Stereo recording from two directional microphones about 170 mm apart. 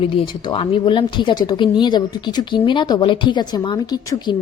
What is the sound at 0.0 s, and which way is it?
Speech, 30° left (ahead or behind).